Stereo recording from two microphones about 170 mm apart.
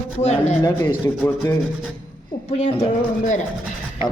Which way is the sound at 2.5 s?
40° left (ahead or behind).